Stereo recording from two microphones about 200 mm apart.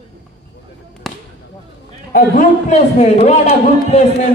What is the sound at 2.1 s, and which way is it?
A man's voice, 40° left (ahead or behind).